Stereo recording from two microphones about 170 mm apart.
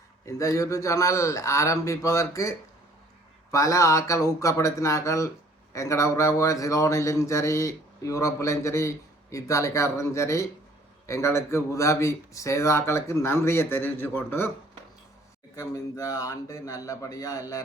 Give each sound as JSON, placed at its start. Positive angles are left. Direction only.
{"t": 0.3, "sound": "speech", "side_deg": 20}
{"t": 15.5, "sound": "a man's voice", "side_deg": 20}